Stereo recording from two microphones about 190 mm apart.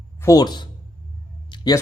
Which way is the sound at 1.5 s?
25° left (ahead or behind).